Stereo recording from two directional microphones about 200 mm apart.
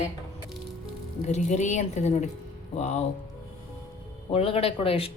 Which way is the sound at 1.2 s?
35° left (ahead or behind).